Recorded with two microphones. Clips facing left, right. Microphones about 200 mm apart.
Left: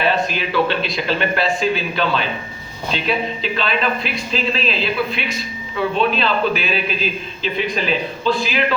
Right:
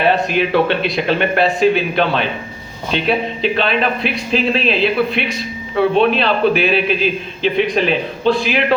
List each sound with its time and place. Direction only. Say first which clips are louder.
0.0 s a man's voice: right 4 dB; 60° right (ahead or behind)